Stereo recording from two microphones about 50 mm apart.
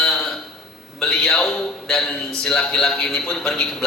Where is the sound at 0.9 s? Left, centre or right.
Centre.